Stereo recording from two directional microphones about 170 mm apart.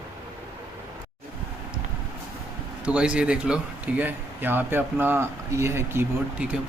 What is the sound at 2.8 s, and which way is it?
Speech, 5° right (ahead or behind).